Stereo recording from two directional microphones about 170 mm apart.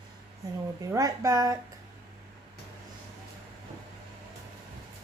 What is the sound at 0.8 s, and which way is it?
Speech, 20° right (ahead or behind).